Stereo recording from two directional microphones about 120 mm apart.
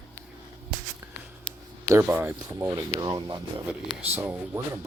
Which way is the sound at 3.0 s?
35° right (ahead or behind).